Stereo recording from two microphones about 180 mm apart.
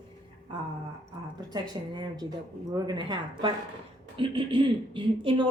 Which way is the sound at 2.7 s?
25° right (ahead or behind).